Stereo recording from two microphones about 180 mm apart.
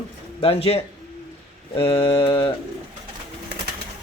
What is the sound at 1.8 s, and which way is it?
Mantra, 30° left (ahead or behind).